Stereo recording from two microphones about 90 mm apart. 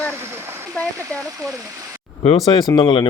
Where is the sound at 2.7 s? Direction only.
65° left (ahead or behind).